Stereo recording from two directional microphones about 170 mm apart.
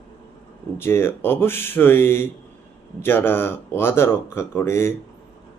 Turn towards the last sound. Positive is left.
turn(degrees=15)  # may be behind; listen again after turning